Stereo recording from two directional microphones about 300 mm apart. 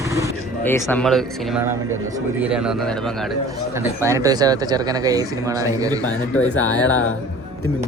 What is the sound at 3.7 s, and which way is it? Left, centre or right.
Speech, centre.